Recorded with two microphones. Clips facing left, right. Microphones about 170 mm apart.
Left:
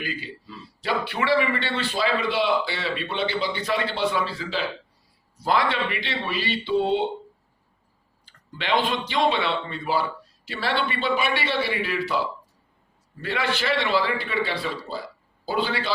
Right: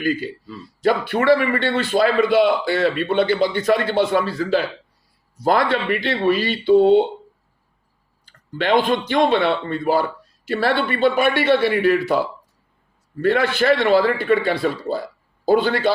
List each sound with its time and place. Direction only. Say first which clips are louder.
0.0 s a man's voice: right 11 dB; 45° right (ahead or behind)
8.2 s a man's voice: right 10 dB; 45° right (ahead or behind)
13.2 s a man's voice: right 9 dB; 50° right (ahead or behind)